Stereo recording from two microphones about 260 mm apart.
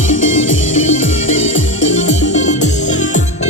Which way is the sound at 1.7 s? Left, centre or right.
Left.